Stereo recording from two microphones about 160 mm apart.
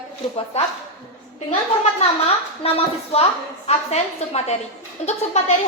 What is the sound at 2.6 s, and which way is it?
A child's voice, 40° left (ahead or behind).